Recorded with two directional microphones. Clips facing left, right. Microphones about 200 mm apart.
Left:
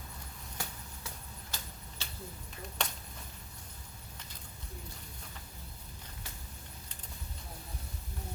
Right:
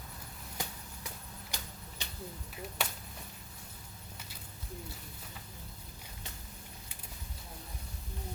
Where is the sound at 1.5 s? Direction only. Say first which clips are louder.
Right 1 dB; 15° right (ahead or behind).